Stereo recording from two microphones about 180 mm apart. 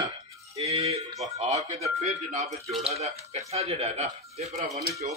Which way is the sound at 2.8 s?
35° right (ahead or behind).